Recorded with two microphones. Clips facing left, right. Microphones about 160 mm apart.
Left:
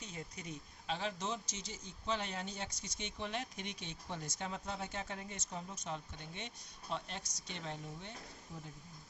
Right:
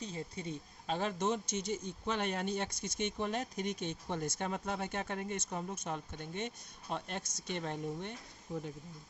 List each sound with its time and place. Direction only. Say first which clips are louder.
0.0 s speech: right 6 dB; 30° right (ahead or behind)
0.9 s speech: right 6 dB; 50° right (ahead or behind)